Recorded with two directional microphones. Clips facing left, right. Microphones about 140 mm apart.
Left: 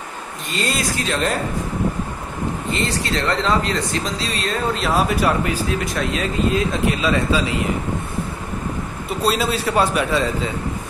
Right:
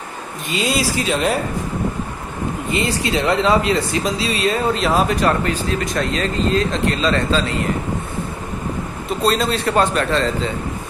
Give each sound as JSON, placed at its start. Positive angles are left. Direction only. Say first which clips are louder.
{"t": 0.5, "sound": "speech", "louder": "right 3 dB", "side_deg": -5}
{"t": 2.7, "sound": "speech", "louder": "right 4 dB", "side_deg": -10}
{"t": 9.2, "sound": "a man's voice", "louder": "right 2 dB", "side_deg": 5}